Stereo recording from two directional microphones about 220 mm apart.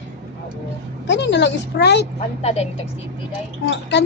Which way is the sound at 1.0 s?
50° left (ahead or behind).